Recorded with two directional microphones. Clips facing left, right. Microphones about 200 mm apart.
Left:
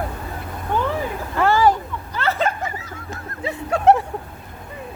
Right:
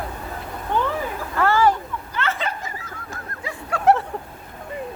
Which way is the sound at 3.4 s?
25° left (ahead or behind).